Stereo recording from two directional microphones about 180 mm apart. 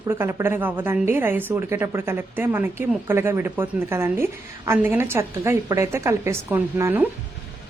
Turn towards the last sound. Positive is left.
turn(degrees=-10)  # may be behind; listen again after turning